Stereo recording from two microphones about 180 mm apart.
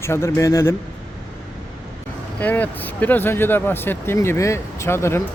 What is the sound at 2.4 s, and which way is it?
Speech, 10° left (ahead or behind).